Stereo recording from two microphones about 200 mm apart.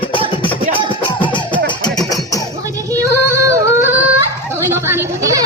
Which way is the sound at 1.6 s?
20° left (ahead or behind).